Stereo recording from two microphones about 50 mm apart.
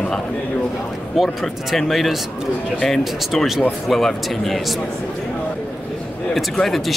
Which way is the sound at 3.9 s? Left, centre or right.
Centre.